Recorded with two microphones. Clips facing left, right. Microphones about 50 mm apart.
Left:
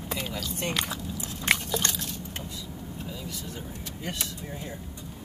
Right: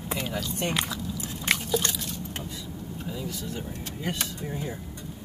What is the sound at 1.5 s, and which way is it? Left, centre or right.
Liquid, centre.